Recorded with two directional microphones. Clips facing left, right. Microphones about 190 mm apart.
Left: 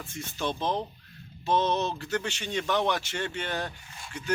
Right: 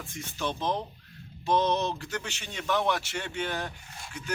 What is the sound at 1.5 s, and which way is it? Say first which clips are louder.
Speech: even; 15° right (ahead or behind).